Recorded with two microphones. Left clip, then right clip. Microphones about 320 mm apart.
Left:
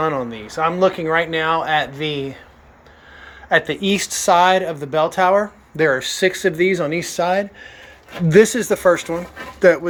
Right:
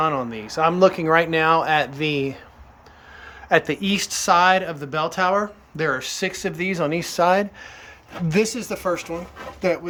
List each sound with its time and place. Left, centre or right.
0.0 s speech: centre
3.5 s speech: centre
8.3 s speech: centre